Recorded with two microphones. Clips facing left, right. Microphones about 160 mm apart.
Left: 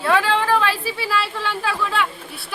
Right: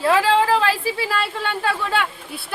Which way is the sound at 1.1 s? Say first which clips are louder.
Even; 50° right (ahead or behind).